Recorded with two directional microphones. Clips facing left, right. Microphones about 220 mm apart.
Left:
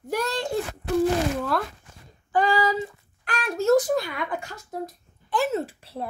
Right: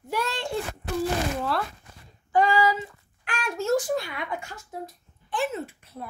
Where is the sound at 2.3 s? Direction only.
35° left (ahead or behind).